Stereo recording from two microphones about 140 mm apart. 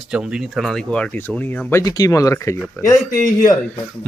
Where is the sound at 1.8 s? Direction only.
25° left (ahead or behind).